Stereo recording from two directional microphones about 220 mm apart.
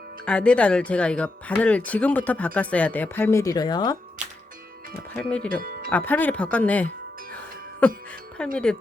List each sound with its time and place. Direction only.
0.3 s speech: 5° left (ahead or behind)
5.1 s speech: 5° left (ahead or behind)
5.5 s speech: 40° right (ahead or behind)
5.9 s speech: 10° left (ahead or behind)
7.3 s music: 5° left (ahead or behind)
8.4 s speech: 5° left (ahead or behind)